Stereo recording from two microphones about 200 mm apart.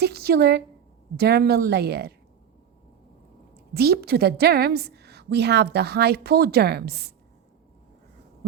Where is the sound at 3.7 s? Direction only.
50° right (ahead or behind).